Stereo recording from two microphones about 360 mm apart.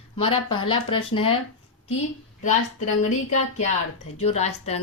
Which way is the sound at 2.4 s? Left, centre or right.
Centre.